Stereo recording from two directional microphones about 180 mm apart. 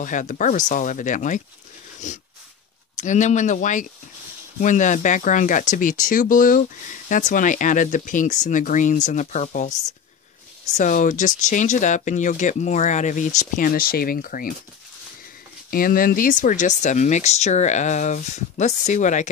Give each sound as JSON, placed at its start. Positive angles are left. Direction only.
{"t": 0.0, "sound": "speech", "side_deg": 45}
{"t": 15.7, "sound": "speech", "side_deg": 50}